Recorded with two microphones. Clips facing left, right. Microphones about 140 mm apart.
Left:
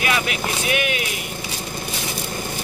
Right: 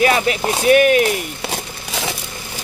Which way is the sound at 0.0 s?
40° right (ahead or behind).